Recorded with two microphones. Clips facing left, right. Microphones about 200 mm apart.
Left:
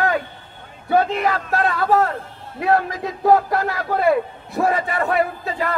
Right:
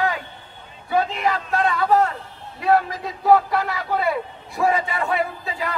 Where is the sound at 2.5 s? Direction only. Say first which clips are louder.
Even; 50° left (ahead or behind).